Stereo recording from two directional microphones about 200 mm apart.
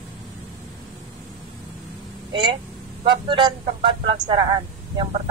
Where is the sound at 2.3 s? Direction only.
25° right (ahead or behind).